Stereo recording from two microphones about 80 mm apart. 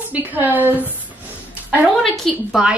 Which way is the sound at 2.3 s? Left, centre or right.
Centre.